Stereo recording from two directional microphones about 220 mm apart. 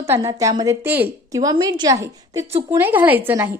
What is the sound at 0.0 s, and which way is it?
A woman's voice, 15° right (ahead or behind).